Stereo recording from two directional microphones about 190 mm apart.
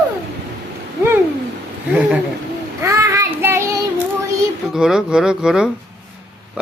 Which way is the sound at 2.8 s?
15° right (ahead or behind).